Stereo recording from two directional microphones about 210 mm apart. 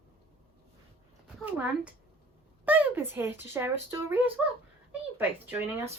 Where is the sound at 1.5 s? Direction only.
5° right (ahead or behind).